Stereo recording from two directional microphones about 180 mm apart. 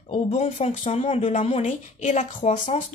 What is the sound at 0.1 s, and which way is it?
A woman's voice, 35° left (ahead or behind).